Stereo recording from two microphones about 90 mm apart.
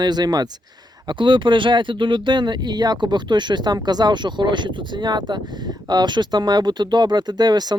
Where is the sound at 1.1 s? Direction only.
65° right (ahead or behind).